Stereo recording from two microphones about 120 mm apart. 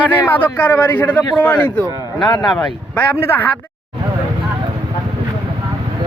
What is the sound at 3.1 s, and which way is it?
Speech, 20° left (ahead or behind).